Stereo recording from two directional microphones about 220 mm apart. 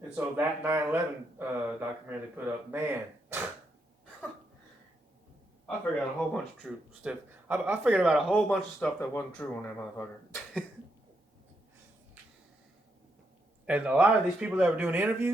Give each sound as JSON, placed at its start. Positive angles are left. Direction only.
{"t": 0.2, "sound": "speech", "side_deg": -10}
{"t": 6.1, "sound": "speech", "side_deg": 0}
{"t": 10.0, "sound": "a sound", "side_deg": 0}
{"t": 13.7, "sound": "speech", "side_deg": -5}